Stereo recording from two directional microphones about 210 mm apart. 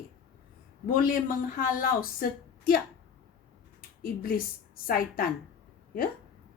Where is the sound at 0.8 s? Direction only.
40° left (ahead or behind).